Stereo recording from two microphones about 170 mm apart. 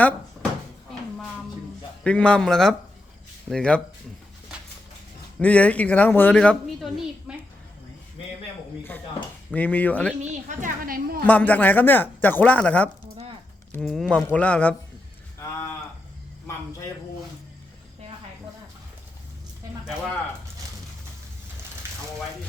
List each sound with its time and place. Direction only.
2.0 s a man's voice: 5° left (ahead or behind)
5.4 s speech: 5° left (ahead or behind)
7.3 s a sound: 5° right (ahead or behind)
9.5 s speech: 10° left (ahead or behind)
10.6 s a woman's voice: 60° right (ahead or behind)
11.3 s a man's voice: 10° left (ahead or behind)